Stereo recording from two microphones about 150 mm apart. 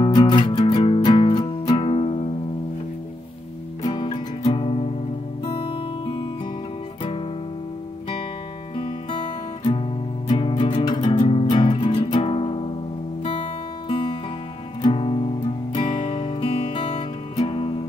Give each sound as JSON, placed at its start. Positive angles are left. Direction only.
{"t": 0.0, "sound": "music", "side_deg": 30}
{"t": 3.9, "sound": "music", "side_deg": 30}
{"t": 8.7, "sound": "music", "side_deg": 35}